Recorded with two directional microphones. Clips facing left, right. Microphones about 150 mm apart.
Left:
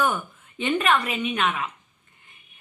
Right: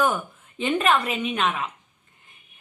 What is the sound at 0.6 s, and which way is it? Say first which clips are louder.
A woman's voice: right 1 dB; 35° right (ahead or behind).